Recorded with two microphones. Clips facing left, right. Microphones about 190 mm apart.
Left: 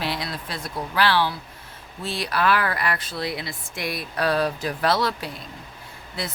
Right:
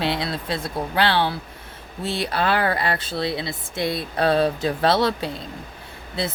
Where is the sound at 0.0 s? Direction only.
25° right (ahead or behind).